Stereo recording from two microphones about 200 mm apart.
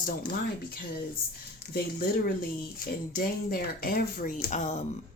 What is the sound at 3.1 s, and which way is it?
Speech, 50° left (ahead or behind).